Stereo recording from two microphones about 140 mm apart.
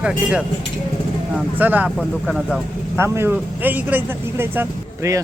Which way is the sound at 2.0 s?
5° left (ahead or behind).